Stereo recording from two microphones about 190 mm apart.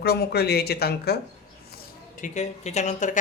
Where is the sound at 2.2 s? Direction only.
35° left (ahead or behind).